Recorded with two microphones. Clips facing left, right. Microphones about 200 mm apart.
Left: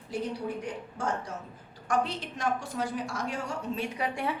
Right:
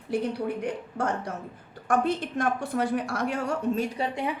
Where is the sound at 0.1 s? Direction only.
60° right (ahead or behind).